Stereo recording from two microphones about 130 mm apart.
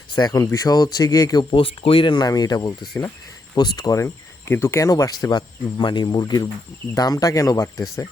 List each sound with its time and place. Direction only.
0.2 s speech: 30° left (ahead or behind)
1.5 s speech: 45° left (ahead or behind); by 7.9 s 25° left (ahead or behind)